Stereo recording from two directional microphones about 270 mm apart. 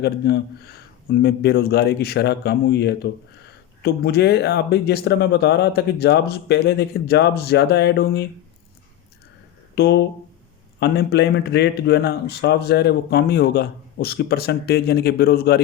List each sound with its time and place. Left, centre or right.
0.0 s a man's voice: left
9.7 s a man's voice: left